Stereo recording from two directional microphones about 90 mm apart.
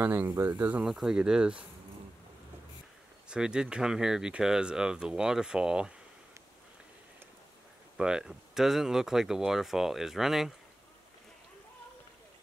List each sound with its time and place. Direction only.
0.0 s speech: 20° right (ahead or behind)
0.8 s speech: 5° right (ahead or behind)
3.3 s speech: 10° right (ahead or behind)
8.0 s speech: 10° right (ahead or behind)